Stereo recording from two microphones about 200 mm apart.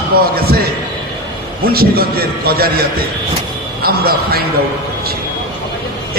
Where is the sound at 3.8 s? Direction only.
50° right (ahead or behind).